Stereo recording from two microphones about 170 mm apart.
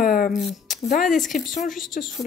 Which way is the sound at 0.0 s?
55° left (ahead or behind).